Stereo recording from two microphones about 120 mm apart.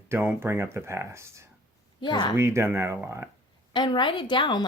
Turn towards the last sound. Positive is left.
turn(degrees=40)  # may be behind; listen again after turning